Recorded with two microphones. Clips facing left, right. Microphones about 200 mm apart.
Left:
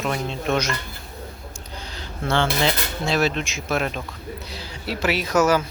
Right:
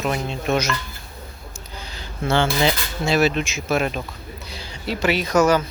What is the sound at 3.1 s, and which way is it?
Speech, 5° right (ahead or behind).